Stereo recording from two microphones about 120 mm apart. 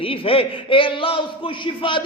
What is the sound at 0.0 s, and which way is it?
A man's voice, 50° left (ahead or behind).